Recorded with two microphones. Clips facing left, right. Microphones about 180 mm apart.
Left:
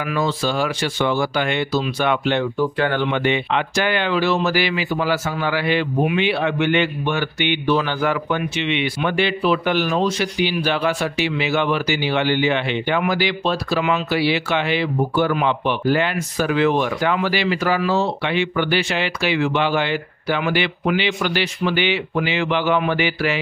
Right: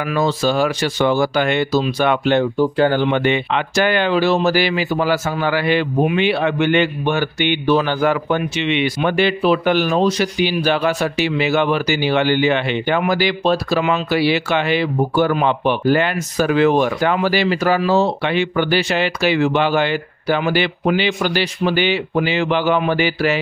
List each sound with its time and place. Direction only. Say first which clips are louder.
0.1 s speech: right 4 dB; 40° right (ahead or behind)